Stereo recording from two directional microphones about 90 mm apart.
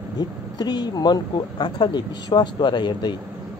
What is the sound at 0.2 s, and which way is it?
Speech, 50° left (ahead or behind).